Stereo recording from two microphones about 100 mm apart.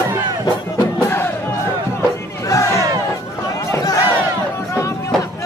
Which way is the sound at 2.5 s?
30° left (ahead or behind).